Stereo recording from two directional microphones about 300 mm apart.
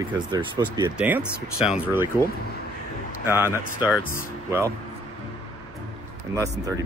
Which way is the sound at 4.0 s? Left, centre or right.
Left.